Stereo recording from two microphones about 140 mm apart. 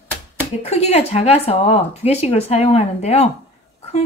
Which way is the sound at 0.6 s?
50° left (ahead or behind).